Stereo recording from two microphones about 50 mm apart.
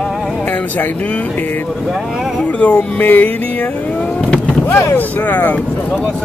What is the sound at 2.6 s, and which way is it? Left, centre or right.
Speech, left.